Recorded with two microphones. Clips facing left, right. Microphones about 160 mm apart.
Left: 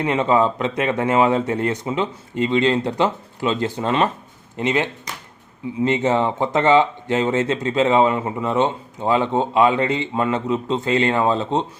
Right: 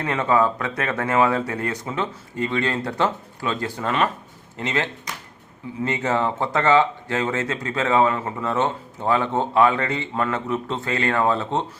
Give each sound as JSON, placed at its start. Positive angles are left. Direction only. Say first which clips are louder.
{"t": 0.0, "sound": "speech", "louder": "left 3 dB", "side_deg": 20}